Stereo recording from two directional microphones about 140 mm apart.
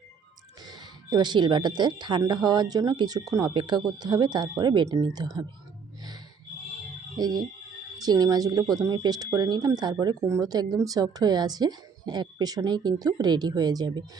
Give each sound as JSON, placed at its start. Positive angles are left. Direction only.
{"t": 0.6, "sound": "speech", "side_deg": -30}
{"t": 7.2, "sound": "speech", "side_deg": -30}